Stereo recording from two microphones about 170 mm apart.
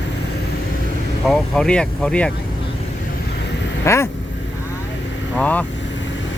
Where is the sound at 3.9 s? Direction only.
15° left (ahead or behind).